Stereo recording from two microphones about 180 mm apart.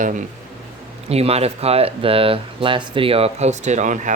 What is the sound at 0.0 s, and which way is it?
Speech, 45° right (ahead or behind).